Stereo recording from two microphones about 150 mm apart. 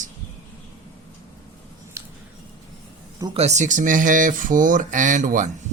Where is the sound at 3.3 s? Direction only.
50° right (ahead or behind).